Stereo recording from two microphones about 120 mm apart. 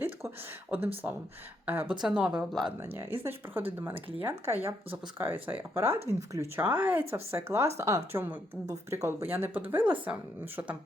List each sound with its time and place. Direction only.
0.7 s speech: 15° right (ahead or behind)
2.8 s speech: 20° right (ahead or behind)
8.6 s speech: 30° right (ahead or behind); by 10.2 s 10° right (ahead or behind)